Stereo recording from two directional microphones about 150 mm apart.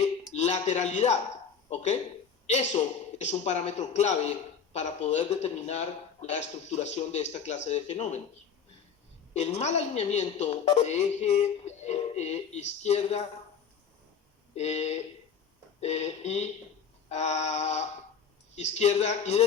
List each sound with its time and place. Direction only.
0.3 s speech: 50° left (ahead or behind)
2.5 s a man's voice: 50° left (ahead or behind)
9.3 s a man's voice: 45° left (ahead or behind)
14.5 s a man's voice: 45° left (ahead or behind)